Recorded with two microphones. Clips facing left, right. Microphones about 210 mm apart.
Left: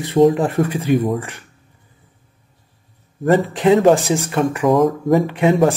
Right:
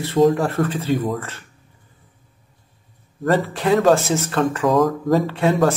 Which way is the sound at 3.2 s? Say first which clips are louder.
Left 5 dB; 20° left (ahead or behind).